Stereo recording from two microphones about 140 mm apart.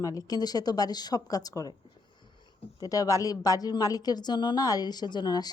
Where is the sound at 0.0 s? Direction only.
25° left (ahead or behind).